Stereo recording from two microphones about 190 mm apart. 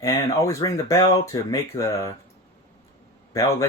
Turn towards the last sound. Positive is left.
turn(degrees=15)  # may be behind; listen again after turning